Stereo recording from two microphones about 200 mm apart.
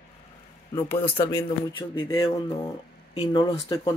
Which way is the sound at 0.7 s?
10° left (ahead or behind).